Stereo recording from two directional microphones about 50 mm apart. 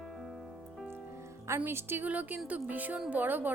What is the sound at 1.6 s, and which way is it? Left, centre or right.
Speech, right.